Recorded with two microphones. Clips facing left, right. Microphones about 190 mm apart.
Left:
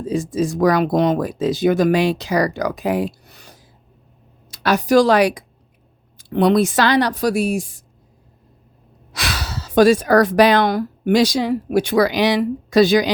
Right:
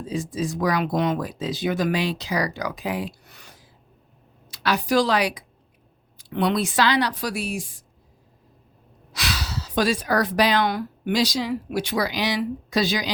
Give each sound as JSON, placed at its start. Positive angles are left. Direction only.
{"t": 0.0, "sound": "speech", "side_deg": 45}
{"t": 4.5, "sound": "a woman's voice", "side_deg": 45}
{"t": 9.1, "sound": "speech", "side_deg": 50}